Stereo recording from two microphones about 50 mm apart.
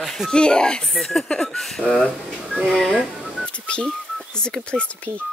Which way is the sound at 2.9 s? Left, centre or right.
Centre.